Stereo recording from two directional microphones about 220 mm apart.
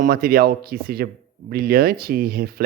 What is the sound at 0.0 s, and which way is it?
Speech, 40° right (ahead or behind).